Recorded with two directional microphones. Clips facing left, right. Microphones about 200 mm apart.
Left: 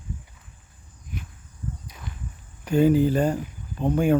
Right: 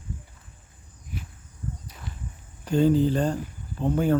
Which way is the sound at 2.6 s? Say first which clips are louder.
Left 2 dB; 10° left (ahead or behind).